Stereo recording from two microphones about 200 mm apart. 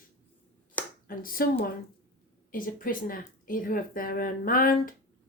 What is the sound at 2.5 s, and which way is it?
Speech, 45° left (ahead or behind).